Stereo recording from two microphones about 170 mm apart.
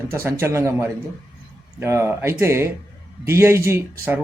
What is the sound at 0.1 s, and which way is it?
Speech, 15° right (ahead or behind).